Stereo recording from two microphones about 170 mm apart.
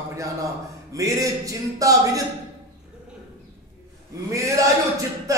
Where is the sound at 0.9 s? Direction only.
20° right (ahead or behind).